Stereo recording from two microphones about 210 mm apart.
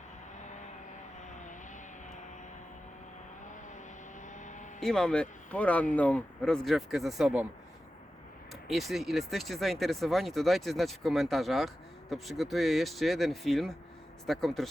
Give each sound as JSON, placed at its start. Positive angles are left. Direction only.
{"t": 0.3, "sound": "vehicle", "side_deg": 35}
{"t": 4.3, "sound": "vehicle", "side_deg": 35}
{"t": 4.8, "sound": "speech", "side_deg": 5}
{"t": 8.6, "sound": "speech", "side_deg": 0}